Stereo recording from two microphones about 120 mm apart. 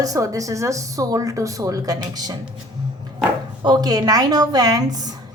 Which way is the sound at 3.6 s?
35° right (ahead or behind).